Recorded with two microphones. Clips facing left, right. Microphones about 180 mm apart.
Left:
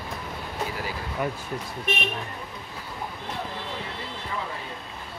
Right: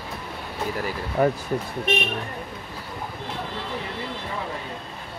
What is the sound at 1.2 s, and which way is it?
Speech, 45° right (ahead or behind).